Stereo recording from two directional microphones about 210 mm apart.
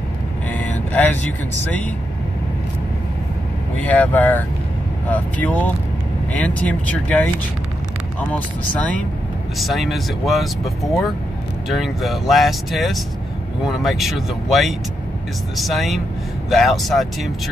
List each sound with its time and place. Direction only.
0.5 s speech: 5° left (ahead or behind)
3.7 s speech: 10° left (ahead or behind)
8.3 s speech: 5° left (ahead or behind)